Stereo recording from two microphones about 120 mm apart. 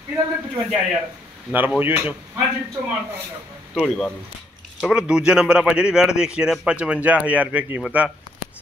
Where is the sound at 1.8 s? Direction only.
15° right (ahead or behind).